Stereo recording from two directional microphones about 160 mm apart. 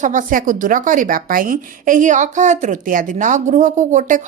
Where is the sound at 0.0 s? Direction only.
55° right (ahead or behind).